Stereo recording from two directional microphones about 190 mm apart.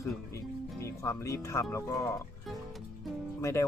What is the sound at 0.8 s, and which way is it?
Speech, 15° left (ahead or behind).